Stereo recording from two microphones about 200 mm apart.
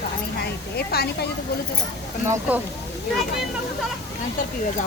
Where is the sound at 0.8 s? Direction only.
50° left (ahead or behind).